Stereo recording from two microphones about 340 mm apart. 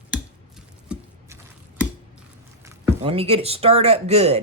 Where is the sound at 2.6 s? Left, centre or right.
Centre.